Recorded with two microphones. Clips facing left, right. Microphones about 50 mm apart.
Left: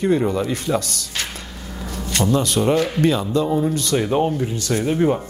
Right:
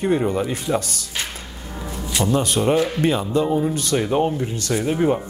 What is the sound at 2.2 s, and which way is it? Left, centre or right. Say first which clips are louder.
Speech: left 1 dB; centre.